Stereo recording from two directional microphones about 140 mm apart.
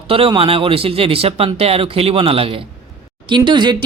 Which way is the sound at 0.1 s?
40° right (ahead or behind).